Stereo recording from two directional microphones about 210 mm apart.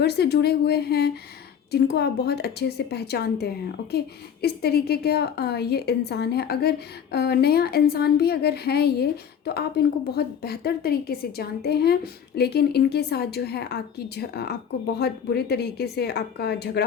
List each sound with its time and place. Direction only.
0.0 s a woman's voice: 50° left (ahead or behind)